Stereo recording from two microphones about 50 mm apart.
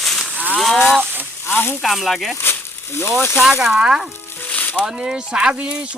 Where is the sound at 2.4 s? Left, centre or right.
Left.